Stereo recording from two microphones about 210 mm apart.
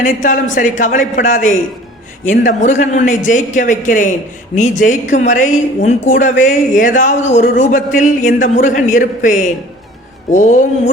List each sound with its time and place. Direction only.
0.0 s speech: 40° left (ahead or behind)